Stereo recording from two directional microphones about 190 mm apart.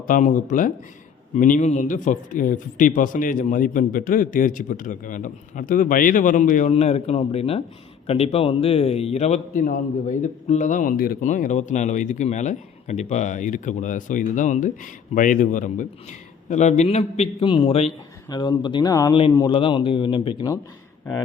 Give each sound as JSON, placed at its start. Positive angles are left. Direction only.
{"t": 0.1, "sound": "a man's voice", "side_deg": 45}